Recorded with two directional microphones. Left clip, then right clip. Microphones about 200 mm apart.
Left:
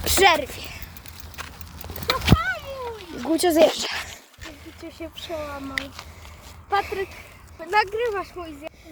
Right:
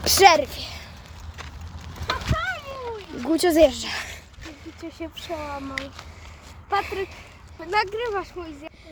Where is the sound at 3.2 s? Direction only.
Centre (ahead or behind).